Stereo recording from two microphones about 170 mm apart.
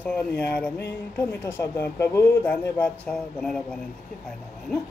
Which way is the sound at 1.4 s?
15° left (ahead or behind).